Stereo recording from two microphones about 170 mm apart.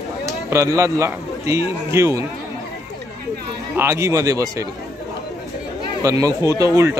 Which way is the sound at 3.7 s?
15° right (ahead or behind).